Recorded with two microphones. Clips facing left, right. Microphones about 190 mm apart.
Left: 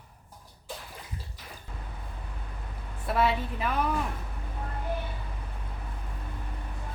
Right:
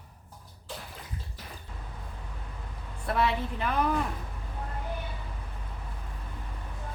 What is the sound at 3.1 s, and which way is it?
Speech, 5° left (ahead or behind).